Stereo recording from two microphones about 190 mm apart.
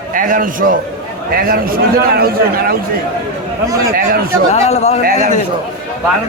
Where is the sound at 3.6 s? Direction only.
15° right (ahead or behind).